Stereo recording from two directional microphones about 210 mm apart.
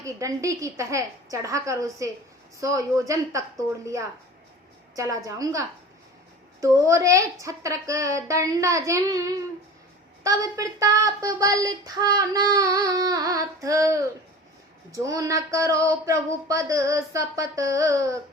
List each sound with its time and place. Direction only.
0.0 s speech: 15° right (ahead or behind)